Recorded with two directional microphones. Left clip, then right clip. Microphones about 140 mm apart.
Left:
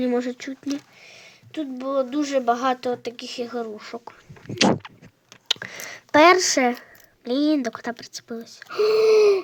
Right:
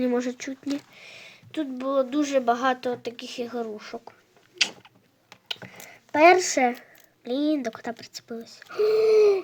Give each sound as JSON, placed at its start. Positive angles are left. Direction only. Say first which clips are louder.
{"t": 0.0, "sound": "speech", "louder": "left 2 dB", "side_deg": 5}
{"t": 4.5, "sound": "a sound", "louder": "left 6 dB", "side_deg": 45}
{"t": 5.5, "sound": "speech", "louder": "left 9 dB", "side_deg": 35}